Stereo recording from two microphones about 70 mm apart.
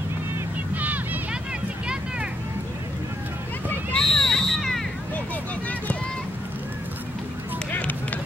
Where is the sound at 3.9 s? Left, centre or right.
Centre.